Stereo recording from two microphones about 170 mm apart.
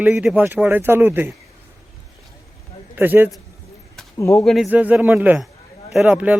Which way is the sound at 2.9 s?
10° right (ahead or behind).